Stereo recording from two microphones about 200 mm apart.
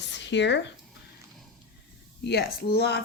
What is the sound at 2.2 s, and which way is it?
Speech, 55° left (ahead or behind).